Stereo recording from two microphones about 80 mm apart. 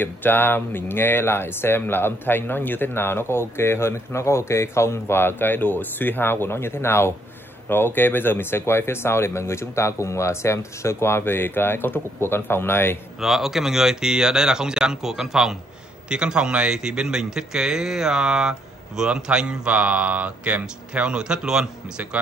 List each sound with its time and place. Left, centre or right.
0.0 s speech: left
13.2 s a man's voice: centre